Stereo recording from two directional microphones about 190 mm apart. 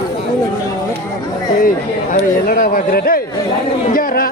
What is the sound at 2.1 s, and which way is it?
Speech, 45° left (ahead or behind).